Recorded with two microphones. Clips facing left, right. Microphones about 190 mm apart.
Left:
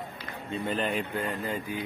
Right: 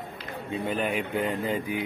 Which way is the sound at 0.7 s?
10° right (ahead or behind).